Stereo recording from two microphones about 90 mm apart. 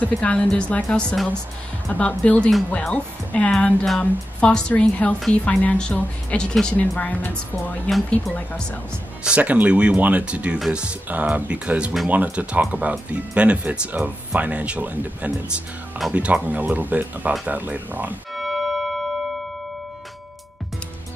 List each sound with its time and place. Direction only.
0.0 s speech: 15° left (ahead or behind)
1.9 s speech: 15° left (ahead or behind)
9.2 s speech: 15° right (ahead or behind)
18.3 s music: centre (ahead or behind)